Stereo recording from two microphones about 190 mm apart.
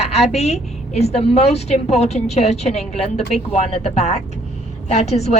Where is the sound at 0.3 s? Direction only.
35° left (ahead or behind).